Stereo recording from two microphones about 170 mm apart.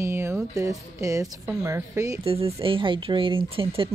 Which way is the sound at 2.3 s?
35° right (ahead or behind).